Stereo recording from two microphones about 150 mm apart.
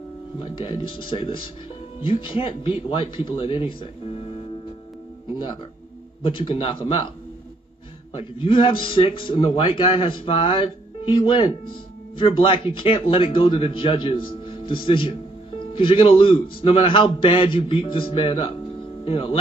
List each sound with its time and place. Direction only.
0.4 s a man's voice: 35° left (ahead or behind)
6.2 s a man's voice: 35° left (ahead or behind)
8.1 s a man's voice: 35° left (ahead or behind)